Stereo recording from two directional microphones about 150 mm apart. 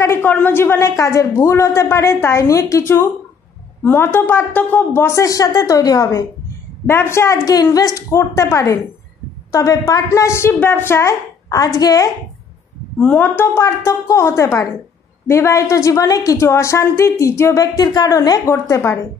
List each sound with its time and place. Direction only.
0.0 s a woman's voice: 15° left (ahead or behind)
13.0 s a woman's voice: 10° left (ahead or behind)